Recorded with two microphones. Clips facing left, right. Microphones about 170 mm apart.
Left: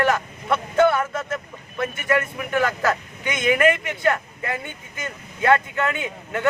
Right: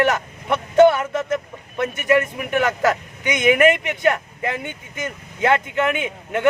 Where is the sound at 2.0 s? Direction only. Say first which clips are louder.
Right 5 dB; 20° right (ahead or behind).